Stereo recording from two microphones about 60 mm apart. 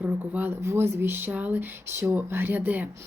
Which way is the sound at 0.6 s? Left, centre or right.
Right.